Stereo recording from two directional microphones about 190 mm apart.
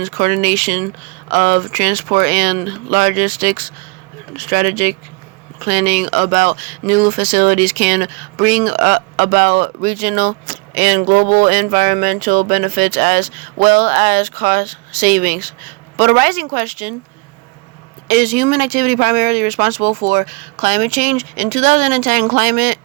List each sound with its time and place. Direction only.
0.0 s speech: 45° right (ahead or behind)
5.5 s speech: 40° right (ahead or behind)
18.1 s speech: 40° right (ahead or behind)